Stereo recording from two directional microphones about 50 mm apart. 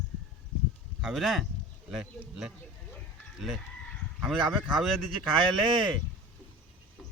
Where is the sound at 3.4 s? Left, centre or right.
Centre.